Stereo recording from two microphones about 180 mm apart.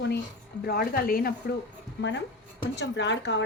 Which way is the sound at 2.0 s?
90° left.